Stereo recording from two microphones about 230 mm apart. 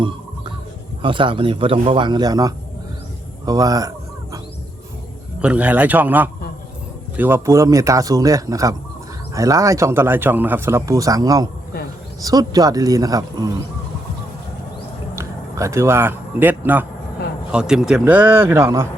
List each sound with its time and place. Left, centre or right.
1.0 s speech: right
3.4 s chicken: centre
5.4 s speech: centre
15.1 s a man's voice: centre